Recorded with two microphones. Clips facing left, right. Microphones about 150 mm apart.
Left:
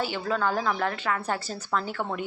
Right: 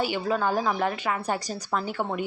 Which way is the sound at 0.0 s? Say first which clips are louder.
Right 2 dB; 15° right (ahead or behind).